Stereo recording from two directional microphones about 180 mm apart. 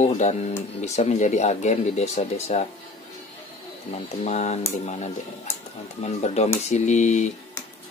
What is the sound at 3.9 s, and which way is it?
Speech, 40° left (ahead or behind).